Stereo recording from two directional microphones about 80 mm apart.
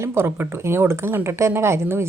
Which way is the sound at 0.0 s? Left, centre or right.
Right.